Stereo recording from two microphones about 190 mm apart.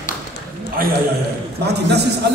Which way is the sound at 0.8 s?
50° right (ahead or behind).